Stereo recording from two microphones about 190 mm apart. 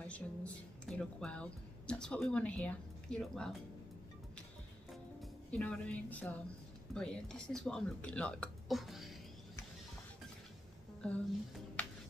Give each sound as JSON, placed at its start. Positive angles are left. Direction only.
{"t": 0.0, "sound": "speech", "side_deg": 5}
{"t": 5.2, "sound": "speech", "side_deg": 5}
{"t": 11.0, "sound": "speech", "side_deg": 5}